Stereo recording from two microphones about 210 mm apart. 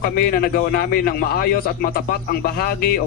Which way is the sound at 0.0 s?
45° left (ahead or behind).